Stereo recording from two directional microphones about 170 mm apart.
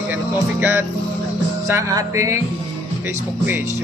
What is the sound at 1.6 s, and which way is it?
Speech, 15° right (ahead or behind).